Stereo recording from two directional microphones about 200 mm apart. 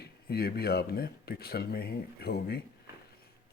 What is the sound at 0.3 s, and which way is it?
Speech, 50° left (ahead or behind).